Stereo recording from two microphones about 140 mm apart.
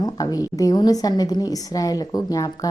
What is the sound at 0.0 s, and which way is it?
Speech, 25° left (ahead or behind).